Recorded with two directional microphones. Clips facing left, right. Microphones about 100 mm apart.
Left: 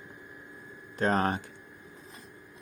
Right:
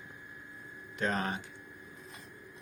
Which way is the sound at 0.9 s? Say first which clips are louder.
Left 6 dB; 40° left (ahead or behind).